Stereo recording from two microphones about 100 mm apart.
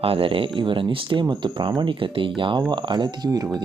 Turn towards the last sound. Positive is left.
turn(degrees=-35)  # may be behind; listen again after turning